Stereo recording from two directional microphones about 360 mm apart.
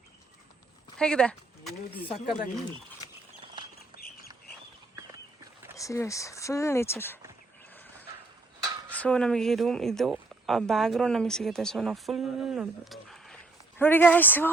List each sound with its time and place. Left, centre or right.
0.9 s speech: centre
3.9 s a sound: left
5.7 s speech: centre
8.9 s speech: centre